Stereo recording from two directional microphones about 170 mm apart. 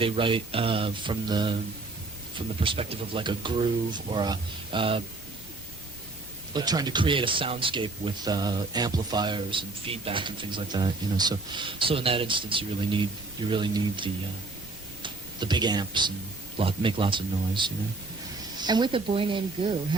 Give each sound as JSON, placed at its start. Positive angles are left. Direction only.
{"t": 0.0, "sound": "speech", "side_deg": -30}
{"t": 2.6, "sound": "speech", "side_deg": -35}
{"t": 6.5, "sound": "speech", "side_deg": -25}